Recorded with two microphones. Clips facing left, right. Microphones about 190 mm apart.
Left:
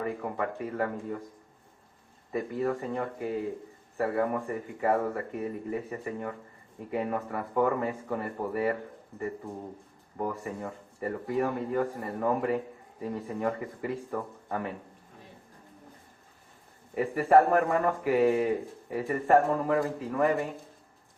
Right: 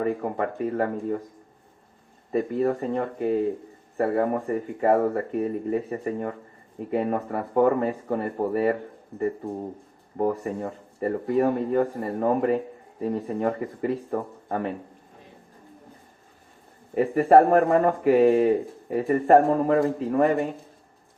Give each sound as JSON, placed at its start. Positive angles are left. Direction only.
{"t": 0.0, "sound": "speech", "side_deg": -40}
{"t": 2.3, "sound": "speech", "side_deg": -35}
{"t": 16.9, "sound": "speech", "side_deg": -35}